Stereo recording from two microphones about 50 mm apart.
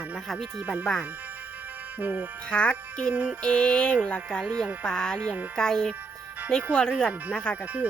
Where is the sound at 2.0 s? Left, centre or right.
Right.